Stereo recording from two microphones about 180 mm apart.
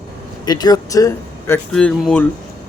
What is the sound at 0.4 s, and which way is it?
Speech, 20° left (ahead or behind).